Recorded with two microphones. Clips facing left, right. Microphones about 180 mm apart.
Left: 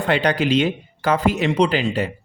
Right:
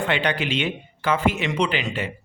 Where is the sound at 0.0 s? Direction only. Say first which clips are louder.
Left 5 dB; 40° left (ahead or behind).